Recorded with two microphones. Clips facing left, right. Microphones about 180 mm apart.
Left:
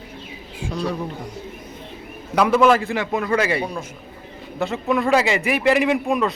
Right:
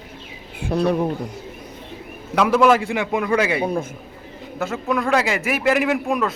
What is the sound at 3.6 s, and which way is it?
Speech, 55° right (ahead or behind).